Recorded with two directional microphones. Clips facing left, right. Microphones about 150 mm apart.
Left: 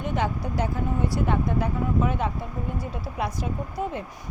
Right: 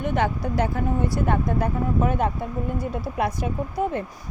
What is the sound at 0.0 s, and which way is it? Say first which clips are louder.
Speech: right 3 dB; 60° right (ahead or behind).